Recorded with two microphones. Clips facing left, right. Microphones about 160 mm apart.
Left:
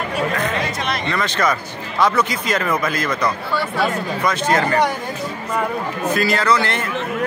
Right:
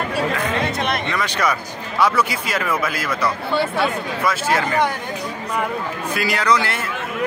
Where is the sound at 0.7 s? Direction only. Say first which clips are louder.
Right 2 dB; 55° right (ahead or behind).